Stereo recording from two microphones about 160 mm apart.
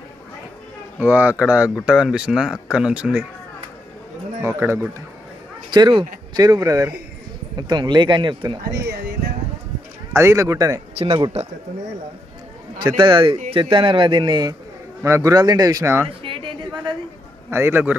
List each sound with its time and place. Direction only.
0.9 s speech: 10° right (ahead or behind)
4.5 s speech: 15° right (ahead or behind)
5.7 s speech: 30° right (ahead or behind)
10.1 s speech: 15° right (ahead or behind)
11.0 s speech: 30° right (ahead or behind)
12.7 s speech: 30° right (ahead or behind)
16.2 s a sound: 35° right (ahead or behind)
17.5 s speech: 15° right (ahead or behind)